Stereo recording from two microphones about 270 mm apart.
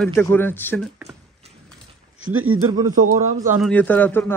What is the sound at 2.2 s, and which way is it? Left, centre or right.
Speech, right.